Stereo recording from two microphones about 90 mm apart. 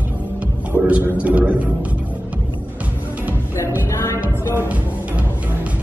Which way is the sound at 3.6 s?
35° left (ahead or behind).